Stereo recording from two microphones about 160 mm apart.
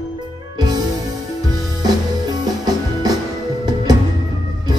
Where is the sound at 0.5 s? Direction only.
25° right (ahead or behind).